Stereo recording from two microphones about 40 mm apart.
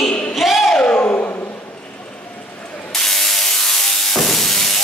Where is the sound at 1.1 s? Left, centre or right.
Left.